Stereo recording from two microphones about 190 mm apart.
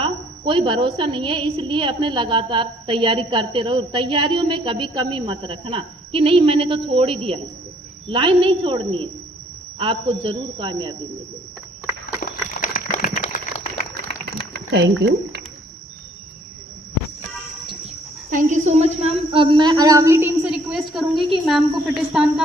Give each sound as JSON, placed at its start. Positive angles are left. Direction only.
{"t": 0.0, "sound": "a woman's voice", "side_deg": -25}
{"t": 12.2, "sound": "a sound", "side_deg": 45}
{"t": 14.3, "sound": "speech", "side_deg": -60}
{"t": 18.3, "sound": "a woman's voice", "side_deg": -40}
{"t": 20.5, "sound": "a woman's voice", "side_deg": 0}